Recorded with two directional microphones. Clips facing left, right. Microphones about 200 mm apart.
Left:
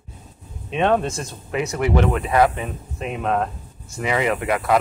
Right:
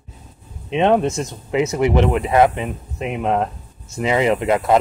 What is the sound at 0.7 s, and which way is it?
Speech, 20° right (ahead or behind).